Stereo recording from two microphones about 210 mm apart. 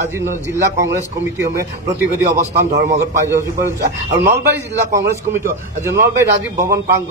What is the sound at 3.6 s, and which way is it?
Speech, 50° right (ahead or behind).